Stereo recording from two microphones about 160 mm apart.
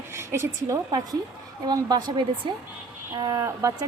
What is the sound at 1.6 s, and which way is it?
Speech, 25° right (ahead or behind).